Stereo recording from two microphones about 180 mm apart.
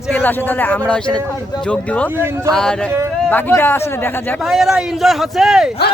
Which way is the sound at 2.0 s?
15° right (ahead or behind).